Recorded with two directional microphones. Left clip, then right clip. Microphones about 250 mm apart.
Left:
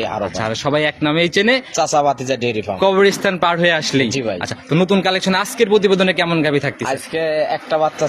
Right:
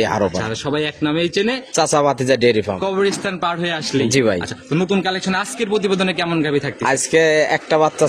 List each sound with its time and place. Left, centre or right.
0.4 s a man's voice: left
1.8 s speech: right
2.8 s a man's voice: left
6.9 s speech: right